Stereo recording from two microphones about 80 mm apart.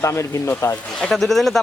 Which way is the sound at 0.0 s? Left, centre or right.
Left.